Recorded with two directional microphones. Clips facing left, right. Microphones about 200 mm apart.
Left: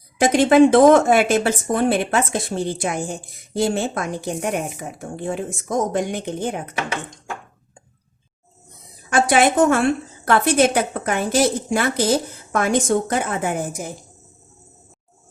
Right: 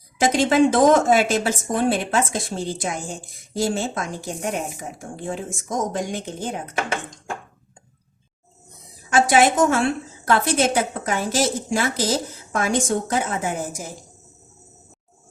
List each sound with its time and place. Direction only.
0.2 s a woman's voice: 60° left (ahead or behind)
9.0 s a woman's voice: 55° left (ahead or behind)